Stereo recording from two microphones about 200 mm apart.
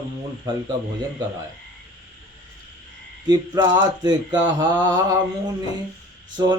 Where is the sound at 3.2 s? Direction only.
20° right (ahead or behind).